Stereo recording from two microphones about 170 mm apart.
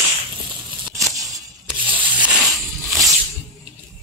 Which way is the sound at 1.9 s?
10° right (ahead or behind).